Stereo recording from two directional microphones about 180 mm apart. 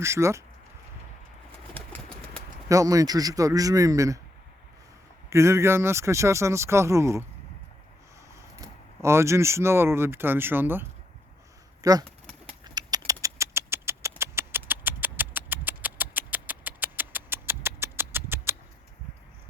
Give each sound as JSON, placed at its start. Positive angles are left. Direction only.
{"t": 0.0, "sound": "speech", "side_deg": -15}
{"t": 2.6, "sound": "speech", "side_deg": -20}
{"t": 5.3, "sound": "speech", "side_deg": -15}
{"t": 8.4, "sound": "speech", "side_deg": -15}
{"t": 12.6, "sound": "a sound", "side_deg": -20}